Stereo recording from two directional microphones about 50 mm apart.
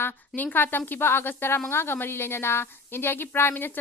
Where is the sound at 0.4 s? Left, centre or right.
Left.